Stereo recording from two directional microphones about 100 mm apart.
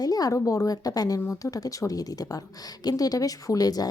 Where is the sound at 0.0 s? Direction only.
40° left (ahead or behind).